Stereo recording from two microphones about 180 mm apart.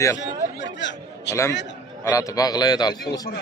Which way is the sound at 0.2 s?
80° left.